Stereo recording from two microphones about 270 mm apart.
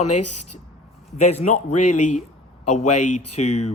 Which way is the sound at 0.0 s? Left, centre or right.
Left.